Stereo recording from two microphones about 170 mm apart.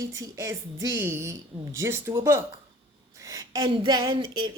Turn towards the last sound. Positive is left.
turn(degrees=-25)  # may be behind; listen again after turning